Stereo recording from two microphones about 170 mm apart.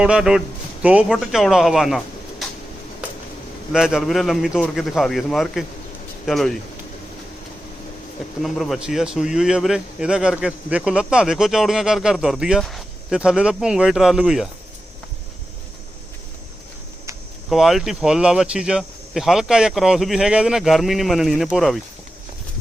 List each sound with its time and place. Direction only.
0.0 s speech: 5° right (ahead or behind)
3.7 s speech: centre (ahead or behind)
8.4 s speech: centre (ahead or behind)
17.5 s speech: centre (ahead or behind)